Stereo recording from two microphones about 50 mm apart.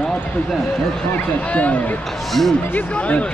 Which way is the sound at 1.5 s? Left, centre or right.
Left.